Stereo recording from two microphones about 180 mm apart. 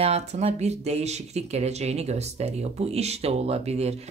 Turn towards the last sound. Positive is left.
turn(degrees=-35)  # may be behind; listen again after turning